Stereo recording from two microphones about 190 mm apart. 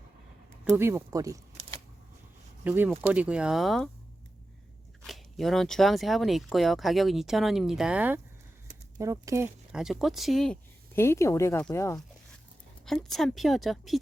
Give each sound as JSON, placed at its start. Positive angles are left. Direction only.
{"t": 0.6, "sound": "speech", "side_deg": -15}
{"t": 2.6, "sound": "speech", "side_deg": -10}
{"t": 5.0, "sound": "speech", "side_deg": 0}
{"t": 9.7, "sound": "speech", "side_deg": 0}
{"t": 12.8, "sound": "speech", "side_deg": 0}